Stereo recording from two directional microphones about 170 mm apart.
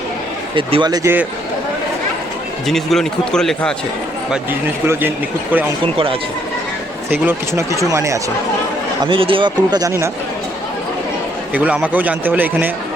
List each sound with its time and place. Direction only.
0.5 s speech: 30° right (ahead or behind)
2.6 s speech: centre (ahead or behind)
4.9 s a man's voice: 10° right (ahead or behind)
7.1 s a man's voice: 10° right (ahead or behind)
9.0 s speech: 30° right (ahead or behind)
11.5 s a man's voice: 10° right (ahead or behind)